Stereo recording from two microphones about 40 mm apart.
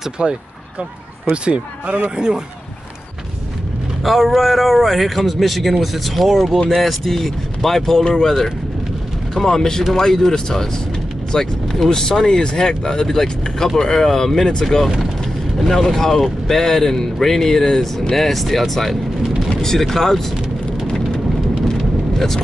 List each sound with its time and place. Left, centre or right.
0.2 s speech: right
4.0 s a man's voice: centre
9.5 s speech: centre
18.1 s a man's voice: centre
20.8 s vehicle: centre